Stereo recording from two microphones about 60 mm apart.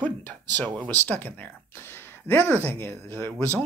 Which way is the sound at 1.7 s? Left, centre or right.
Left.